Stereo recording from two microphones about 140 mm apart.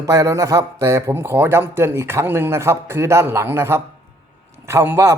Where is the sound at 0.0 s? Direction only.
25° right (ahead or behind).